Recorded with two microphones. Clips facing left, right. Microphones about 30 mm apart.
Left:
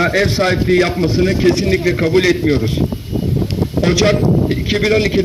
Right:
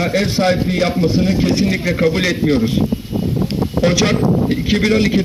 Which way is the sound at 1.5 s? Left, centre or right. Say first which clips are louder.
Left 2 dB; centre.